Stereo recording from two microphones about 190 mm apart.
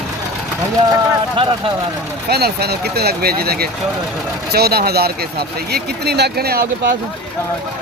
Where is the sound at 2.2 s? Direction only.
55° right (ahead or behind).